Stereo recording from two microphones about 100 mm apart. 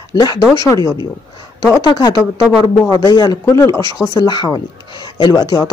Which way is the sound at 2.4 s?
Centre (ahead or behind).